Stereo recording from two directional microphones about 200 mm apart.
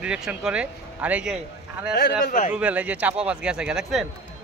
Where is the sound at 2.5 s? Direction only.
5° right (ahead or behind).